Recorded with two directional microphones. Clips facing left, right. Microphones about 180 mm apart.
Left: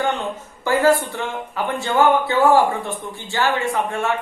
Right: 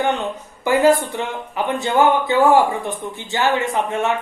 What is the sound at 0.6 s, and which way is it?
Speech, 15° right (ahead or behind).